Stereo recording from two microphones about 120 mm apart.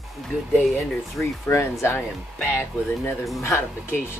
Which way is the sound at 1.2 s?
15° left (ahead or behind).